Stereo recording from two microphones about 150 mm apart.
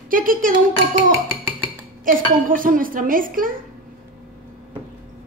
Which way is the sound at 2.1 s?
65° right (ahead or behind).